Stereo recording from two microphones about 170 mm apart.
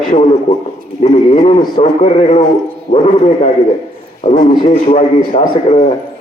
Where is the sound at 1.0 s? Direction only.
40° left (ahead or behind).